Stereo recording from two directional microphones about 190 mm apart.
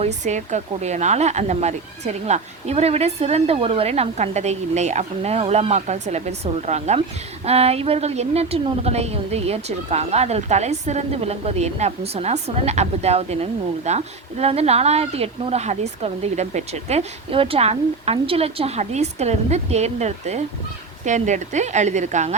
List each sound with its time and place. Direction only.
0.3 s a woman's voice: 40° right (ahead or behind)